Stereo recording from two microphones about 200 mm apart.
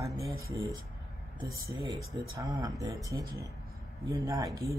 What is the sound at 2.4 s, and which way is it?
Speech, 15° right (ahead or behind).